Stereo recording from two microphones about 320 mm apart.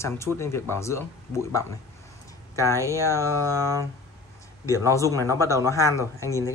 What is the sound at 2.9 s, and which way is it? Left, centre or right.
Speech, centre.